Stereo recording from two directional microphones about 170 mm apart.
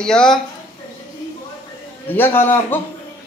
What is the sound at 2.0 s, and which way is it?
Speech, 10° left (ahead or behind).